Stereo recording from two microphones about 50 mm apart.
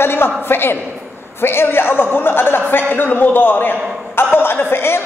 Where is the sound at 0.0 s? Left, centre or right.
Left.